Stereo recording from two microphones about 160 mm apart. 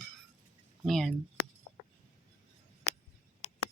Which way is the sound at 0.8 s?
Centre (ahead or behind).